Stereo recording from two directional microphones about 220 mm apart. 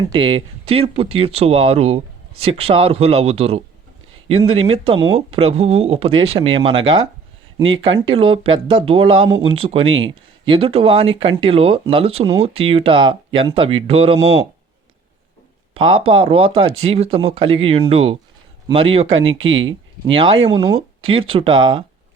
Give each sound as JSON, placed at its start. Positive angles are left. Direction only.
{"t": 0.1, "sound": "speech", "side_deg": -20}
{"t": 15.7, "sound": "speech", "side_deg": -25}